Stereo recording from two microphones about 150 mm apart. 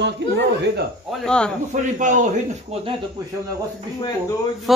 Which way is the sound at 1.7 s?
60° right (ahead or behind).